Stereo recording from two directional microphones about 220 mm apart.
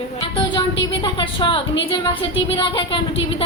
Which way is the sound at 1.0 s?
20° left (ahead or behind).